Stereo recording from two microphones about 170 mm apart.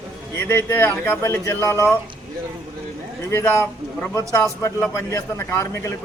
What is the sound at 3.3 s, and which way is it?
A man's voice, 15° left (ahead or behind).